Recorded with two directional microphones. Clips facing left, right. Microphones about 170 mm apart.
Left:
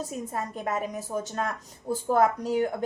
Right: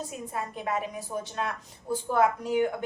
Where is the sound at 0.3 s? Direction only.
45° left (ahead or behind).